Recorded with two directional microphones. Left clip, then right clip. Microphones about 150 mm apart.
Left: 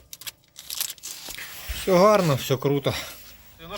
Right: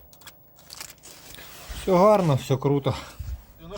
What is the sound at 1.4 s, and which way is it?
Speech, 5° left (ahead or behind).